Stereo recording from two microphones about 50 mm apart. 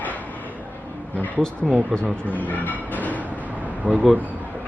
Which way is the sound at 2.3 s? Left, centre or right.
Left.